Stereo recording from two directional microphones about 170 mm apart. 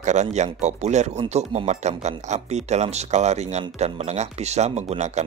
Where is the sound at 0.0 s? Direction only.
45° right (ahead or behind).